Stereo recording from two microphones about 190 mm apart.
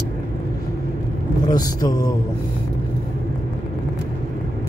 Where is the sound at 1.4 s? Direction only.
20° left (ahead or behind).